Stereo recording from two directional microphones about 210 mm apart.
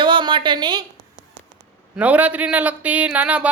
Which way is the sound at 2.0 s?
5° right (ahead or behind).